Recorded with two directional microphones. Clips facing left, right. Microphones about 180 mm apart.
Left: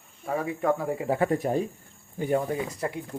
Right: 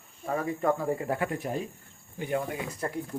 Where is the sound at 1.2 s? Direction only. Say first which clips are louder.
Left 6 dB; 35° left (ahead or behind).